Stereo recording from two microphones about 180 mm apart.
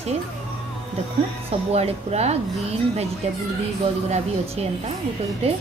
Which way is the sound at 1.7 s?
35° right (ahead or behind).